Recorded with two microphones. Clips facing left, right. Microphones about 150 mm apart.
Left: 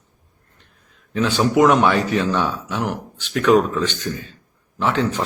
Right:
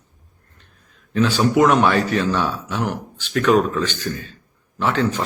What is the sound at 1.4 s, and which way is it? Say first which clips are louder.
Speech: left 1 dB; 15° left (ahead or behind).